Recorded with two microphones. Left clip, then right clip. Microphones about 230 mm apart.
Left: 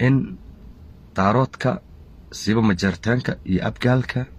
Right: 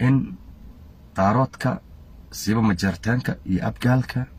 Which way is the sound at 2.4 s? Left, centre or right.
Centre.